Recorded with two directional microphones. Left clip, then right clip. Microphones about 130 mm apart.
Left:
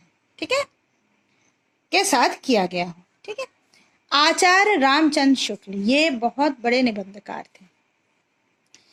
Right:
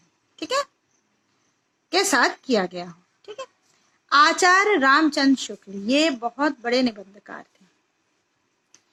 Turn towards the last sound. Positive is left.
turn(degrees=40)  # may be behind; listen again after turning